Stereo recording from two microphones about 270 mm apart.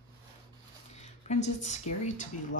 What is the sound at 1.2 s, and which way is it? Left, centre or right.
Speech, left.